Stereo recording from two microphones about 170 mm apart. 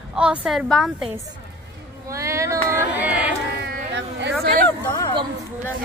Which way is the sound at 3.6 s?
80° right.